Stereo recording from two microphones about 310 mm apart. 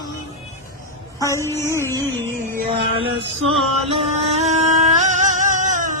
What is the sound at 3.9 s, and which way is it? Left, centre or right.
Music, centre.